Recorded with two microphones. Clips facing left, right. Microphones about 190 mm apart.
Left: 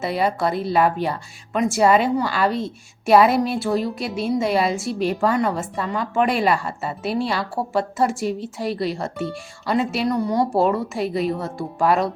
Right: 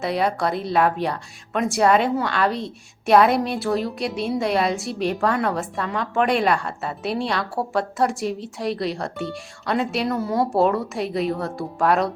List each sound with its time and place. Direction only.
0.0 s speech: centre (ahead or behind)